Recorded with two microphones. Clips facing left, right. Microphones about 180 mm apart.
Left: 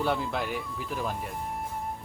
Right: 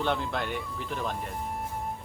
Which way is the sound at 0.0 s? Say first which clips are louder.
Left 1 dB; 5° left (ahead or behind).